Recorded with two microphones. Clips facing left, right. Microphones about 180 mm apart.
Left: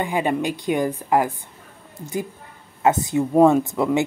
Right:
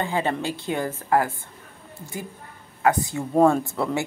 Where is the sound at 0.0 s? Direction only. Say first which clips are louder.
Left 3 dB; 15° left (ahead or behind).